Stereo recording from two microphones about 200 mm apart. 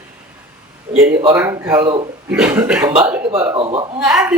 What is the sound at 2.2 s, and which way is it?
Speech, 5° right (ahead or behind).